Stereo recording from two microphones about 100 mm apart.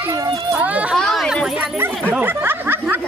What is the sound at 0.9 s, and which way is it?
Chatter, 5° left (ahead or behind).